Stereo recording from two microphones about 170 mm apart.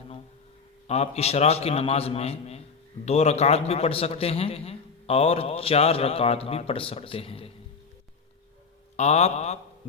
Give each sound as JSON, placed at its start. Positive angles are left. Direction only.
{"t": 0.9, "sound": "a man's voice", "side_deg": 40}
{"t": 9.0, "sound": "a man's voice", "side_deg": 40}